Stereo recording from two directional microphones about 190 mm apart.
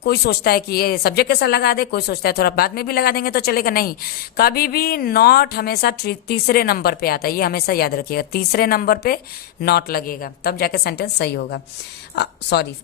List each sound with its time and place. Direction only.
0.0 s a woman's voice: 55° left (ahead or behind)